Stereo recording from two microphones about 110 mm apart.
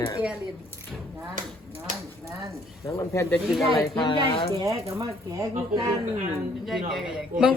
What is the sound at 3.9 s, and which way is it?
Speech, 45° left (ahead or behind).